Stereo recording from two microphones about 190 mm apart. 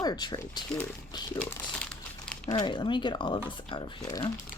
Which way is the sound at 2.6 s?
25° left (ahead or behind).